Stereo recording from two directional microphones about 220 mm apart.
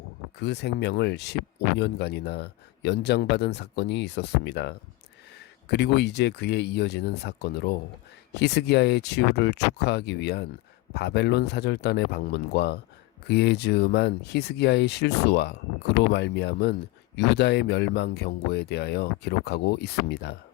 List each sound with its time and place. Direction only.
0.3 s speech: 50° left (ahead or behind)